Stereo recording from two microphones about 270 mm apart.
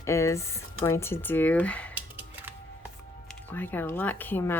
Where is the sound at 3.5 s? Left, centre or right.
Centre.